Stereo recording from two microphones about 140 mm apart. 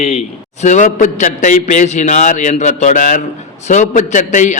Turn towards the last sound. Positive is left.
turn(degrees=65)  # may be behind; listen again after turning